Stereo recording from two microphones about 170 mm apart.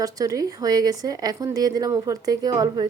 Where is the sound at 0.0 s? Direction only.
20° right (ahead or behind).